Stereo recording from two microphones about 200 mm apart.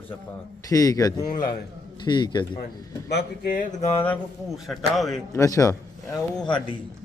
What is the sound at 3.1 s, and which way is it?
Speech, 45° left (ahead or behind).